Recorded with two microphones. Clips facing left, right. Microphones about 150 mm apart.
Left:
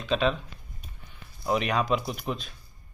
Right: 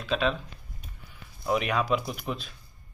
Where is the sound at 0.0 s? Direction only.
Centre (ahead or behind).